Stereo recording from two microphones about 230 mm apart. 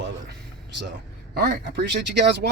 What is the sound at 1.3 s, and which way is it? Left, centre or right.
Speech, right.